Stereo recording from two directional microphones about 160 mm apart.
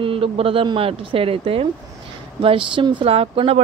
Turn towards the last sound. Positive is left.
turn(degrees=-35)  # may be behind; listen again after turning